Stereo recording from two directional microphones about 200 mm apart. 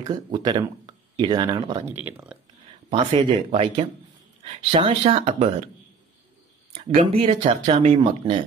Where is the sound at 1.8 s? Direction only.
10° right (ahead or behind).